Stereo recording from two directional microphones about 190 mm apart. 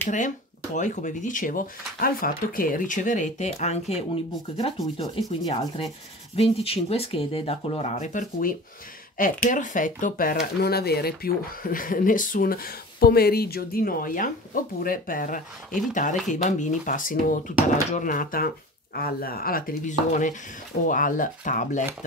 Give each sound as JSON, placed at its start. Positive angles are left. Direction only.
{"t": 0.7, "sound": "speech", "side_deg": 40}
{"t": 4.9, "sound": "rub", "side_deg": 30}
{"t": 6.3, "sound": "speech", "side_deg": 30}